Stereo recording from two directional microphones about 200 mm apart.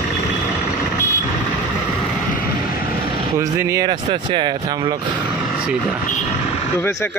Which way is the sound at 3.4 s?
15° right (ahead or behind).